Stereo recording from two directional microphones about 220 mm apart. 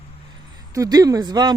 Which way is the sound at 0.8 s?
15° right (ahead or behind).